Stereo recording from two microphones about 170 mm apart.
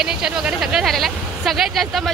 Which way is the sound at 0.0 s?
5° right (ahead or behind).